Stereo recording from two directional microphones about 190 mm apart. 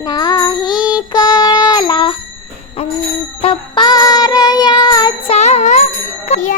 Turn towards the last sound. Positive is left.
turn(degrees=35)  # may be behind; listen again after turning